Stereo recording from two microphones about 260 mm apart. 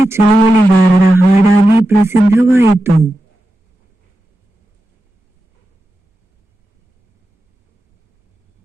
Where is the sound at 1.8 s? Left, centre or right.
Centre.